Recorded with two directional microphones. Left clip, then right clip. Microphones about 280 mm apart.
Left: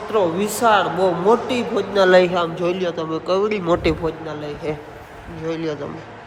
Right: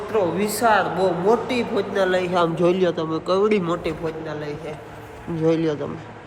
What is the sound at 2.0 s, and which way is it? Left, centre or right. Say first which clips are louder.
Speech: left 9 dB; left.